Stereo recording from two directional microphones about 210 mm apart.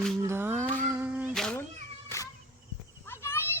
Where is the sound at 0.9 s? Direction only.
5° right (ahead or behind).